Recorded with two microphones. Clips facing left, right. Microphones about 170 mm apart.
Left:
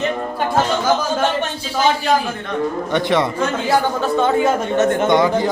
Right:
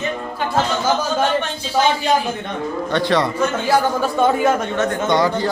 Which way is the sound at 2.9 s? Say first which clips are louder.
Even; 20° left (ahead or behind).